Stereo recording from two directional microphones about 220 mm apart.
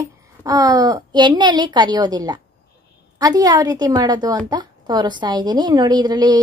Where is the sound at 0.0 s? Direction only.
15° right (ahead or behind).